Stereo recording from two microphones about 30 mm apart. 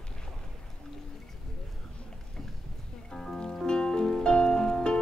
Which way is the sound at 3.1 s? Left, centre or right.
Left.